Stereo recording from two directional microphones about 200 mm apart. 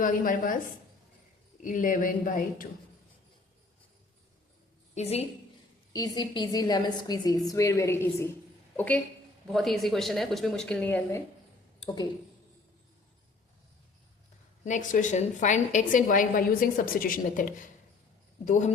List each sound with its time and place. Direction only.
0.0 s a woman's voice: 40° left (ahead or behind)
1.6 s a woman's voice: 40° left (ahead or behind)
4.9 s a woman's voice: 30° left (ahead or behind)
5.9 s a woman's voice: 20° left (ahead or behind)
11.8 s speech: 20° left (ahead or behind)
14.6 s a woman's voice: 40° left (ahead or behind)